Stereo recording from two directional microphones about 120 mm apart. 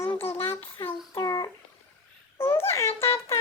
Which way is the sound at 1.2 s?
30° left (ahead or behind).